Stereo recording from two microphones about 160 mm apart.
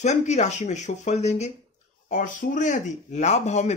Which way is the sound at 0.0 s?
45° left (ahead or behind).